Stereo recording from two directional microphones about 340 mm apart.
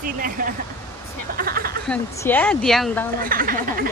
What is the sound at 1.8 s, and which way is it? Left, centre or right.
Speech, centre.